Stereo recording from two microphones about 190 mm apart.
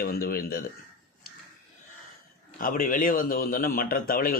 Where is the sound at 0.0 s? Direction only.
50° left (ahead or behind).